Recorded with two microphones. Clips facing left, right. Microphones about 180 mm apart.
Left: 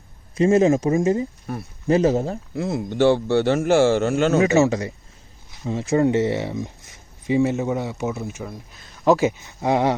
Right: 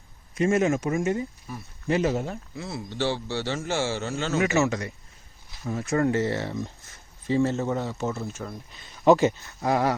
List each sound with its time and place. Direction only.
0.3 s speech: 30° left (ahead or behind)
1.5 s speech: 60° left (ahead or behind)
1.9 s speech: 35° left (ahead or behind)
2.6 s a man's voice: 50° left (ahead or behind)
4.4 s speech: 30° left (ahead or behind); by 8.5 s 15° left (ahead or behind)
8.5 s speech: centre (ahead or behind)
9.4 s speech: 15° left (ahead or behind)